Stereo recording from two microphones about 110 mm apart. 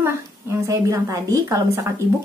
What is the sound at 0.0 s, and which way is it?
Speech, 25° right (ahead or behind).